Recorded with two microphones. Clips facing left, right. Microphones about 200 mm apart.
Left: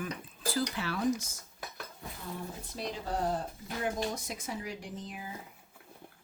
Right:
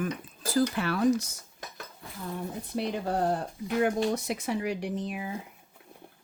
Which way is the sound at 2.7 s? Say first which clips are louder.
Right 7 dB; 60° right (ahead or behind).